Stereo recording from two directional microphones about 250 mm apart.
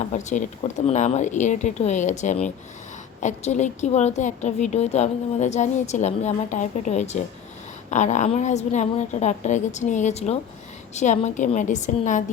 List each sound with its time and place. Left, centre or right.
0.1 s a woman's voice: left